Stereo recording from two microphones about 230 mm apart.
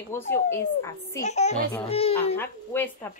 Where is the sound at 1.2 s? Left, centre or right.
Left.